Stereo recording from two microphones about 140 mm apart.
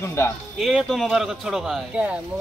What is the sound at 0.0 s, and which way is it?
Speech, 20° left (ahead or behind).